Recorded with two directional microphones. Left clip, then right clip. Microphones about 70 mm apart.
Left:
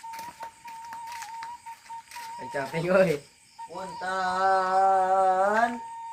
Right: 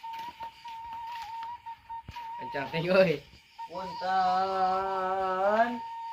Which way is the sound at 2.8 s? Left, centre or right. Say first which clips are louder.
Left 1 dB; centre.